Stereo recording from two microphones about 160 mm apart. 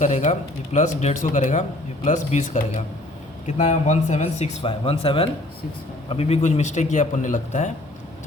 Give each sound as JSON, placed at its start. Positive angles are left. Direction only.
{"t": 0.0, "sound": "speech", "side_deg": 50}